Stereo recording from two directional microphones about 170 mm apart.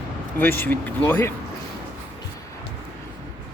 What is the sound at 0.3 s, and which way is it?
Speech, 10° left (ahead or behind).